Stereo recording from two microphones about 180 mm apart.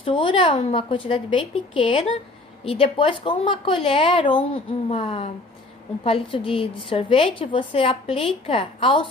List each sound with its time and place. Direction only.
0.0 s a woman's voice: 30° left (ahead or behind)